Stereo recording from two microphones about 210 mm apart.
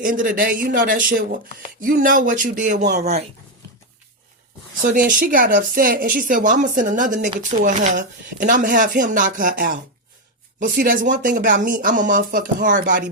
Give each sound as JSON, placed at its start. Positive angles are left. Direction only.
{"t": 0.0, "sound": "speech", "side_deg": -40}
{"t": 4.9, "sound": "speech", "side_deg": -40}